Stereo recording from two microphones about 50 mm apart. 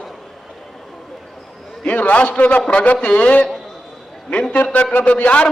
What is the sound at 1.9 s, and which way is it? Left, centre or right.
A man's voice, left.